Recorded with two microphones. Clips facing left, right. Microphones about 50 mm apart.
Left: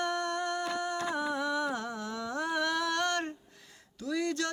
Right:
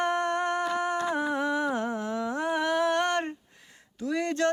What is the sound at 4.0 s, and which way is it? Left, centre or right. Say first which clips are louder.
Speech: right 5 dB; right.